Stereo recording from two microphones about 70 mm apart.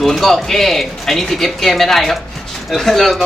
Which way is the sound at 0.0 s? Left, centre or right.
Centre.